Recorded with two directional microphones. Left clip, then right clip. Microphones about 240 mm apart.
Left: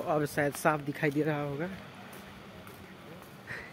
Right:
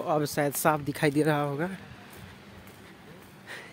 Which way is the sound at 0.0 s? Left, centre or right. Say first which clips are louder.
Right 3 dB; right.